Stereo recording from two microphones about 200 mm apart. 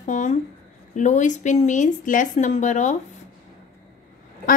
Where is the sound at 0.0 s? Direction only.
40° left (ahead or behind).